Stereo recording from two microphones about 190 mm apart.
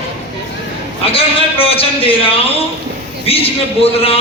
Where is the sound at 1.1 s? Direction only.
30° left (ahead or behind).